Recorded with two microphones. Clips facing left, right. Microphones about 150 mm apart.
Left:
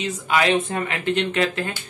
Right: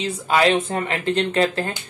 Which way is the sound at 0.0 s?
35° right (ahead or behind).